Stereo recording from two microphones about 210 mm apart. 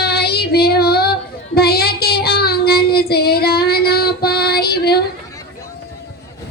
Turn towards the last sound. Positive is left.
turn(degrees=50)  # may be behind; listen again after turning